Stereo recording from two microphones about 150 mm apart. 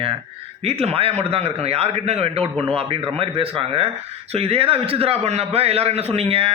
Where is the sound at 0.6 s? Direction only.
45° right (ahead or behind).